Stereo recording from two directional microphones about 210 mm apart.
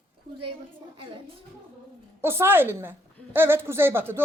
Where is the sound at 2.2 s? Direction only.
10° right (ahead or behind).